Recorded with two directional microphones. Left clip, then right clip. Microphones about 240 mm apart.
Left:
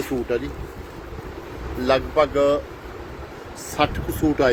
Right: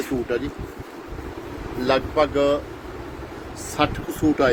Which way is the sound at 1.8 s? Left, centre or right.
Centre.